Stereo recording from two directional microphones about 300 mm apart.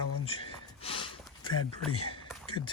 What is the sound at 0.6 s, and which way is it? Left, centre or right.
Snort, centre.